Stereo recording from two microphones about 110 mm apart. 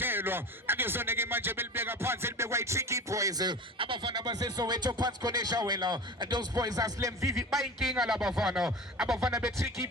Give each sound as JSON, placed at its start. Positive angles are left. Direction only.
{"t": 0.0, "sound": "speech", "side_deg": -20}
{"t": 7.5, "sound": "speech", "side_deg": 0}
{"t": 9.6, "sound": "speech", "side_deg": -25}